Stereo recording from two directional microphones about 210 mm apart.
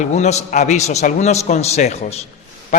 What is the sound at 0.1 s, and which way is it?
A man's voice, 30° left (ahead or behind).